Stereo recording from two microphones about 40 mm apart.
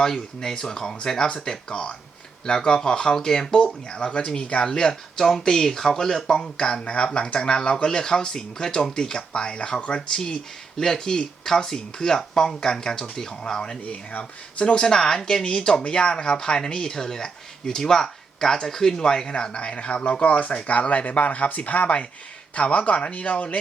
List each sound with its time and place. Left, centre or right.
0.0 s speech: centre
4.4 s speech: left
6.8 s speech: left